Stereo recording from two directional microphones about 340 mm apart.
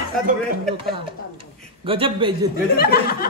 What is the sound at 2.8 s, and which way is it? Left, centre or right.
Speech, left.